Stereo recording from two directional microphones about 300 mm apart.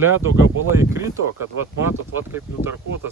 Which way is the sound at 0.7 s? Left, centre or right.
Centre.